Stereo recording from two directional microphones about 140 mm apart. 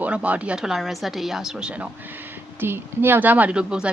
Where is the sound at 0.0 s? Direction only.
10° right (ahead or behind).